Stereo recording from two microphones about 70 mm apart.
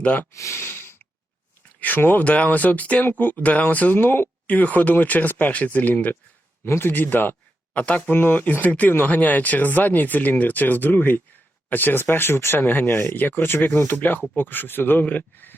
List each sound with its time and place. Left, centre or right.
0.0 s speech: left
0.3 s a sound: left
1.8 s speech: left